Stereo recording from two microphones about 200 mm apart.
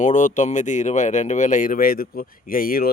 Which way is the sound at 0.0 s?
40° left (ahead or behind).